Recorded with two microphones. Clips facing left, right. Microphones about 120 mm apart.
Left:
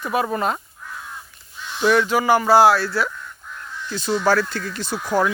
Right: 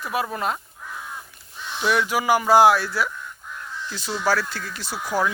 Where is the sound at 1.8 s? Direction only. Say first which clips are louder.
Left 4 dB; 5° right (ahead or behind).